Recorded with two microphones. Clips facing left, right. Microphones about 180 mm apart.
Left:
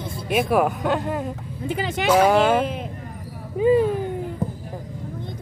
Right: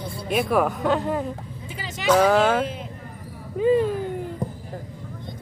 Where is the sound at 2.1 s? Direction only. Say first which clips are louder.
Left 1 dB; 10° left (ahead or behind).